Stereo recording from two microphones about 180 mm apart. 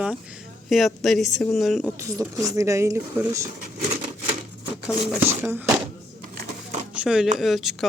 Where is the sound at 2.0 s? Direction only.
15° right (ahead or behind).